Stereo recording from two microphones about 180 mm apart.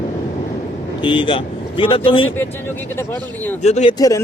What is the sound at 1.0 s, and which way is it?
Speech, 30° left (ahead or behind).